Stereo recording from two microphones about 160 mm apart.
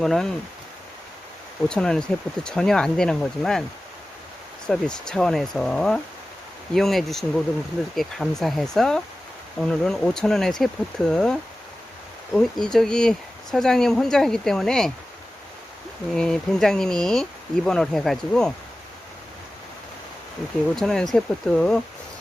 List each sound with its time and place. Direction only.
0.0 s speech: 5° left (ahead or behind)
1.7 s speech: 5° left (ahead or behind)
4.6 s speech: 5° left (ahead or behind)
16.1 s speech: 5° left (ahead or behind)
20.7 s speech: centre (ahead or behind)